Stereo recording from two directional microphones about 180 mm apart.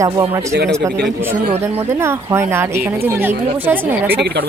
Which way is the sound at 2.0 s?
15° right (ahead or behind).